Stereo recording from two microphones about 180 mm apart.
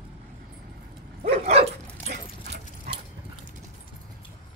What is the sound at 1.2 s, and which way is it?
Dog, 35° right (ahead or behind).